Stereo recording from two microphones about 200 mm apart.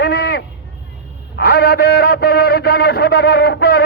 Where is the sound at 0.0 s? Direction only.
55° left (ahead or behind).